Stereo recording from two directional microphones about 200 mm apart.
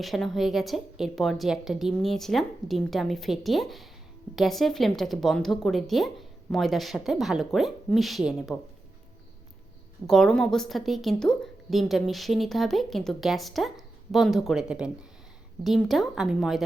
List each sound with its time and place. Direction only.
0.0 s a woman's voice: centre (ahead or behind)
10.1 s a woman's voice: centre (ahead or behind)